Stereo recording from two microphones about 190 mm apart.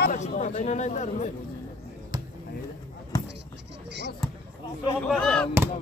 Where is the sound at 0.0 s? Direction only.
40° left (ahead or behind).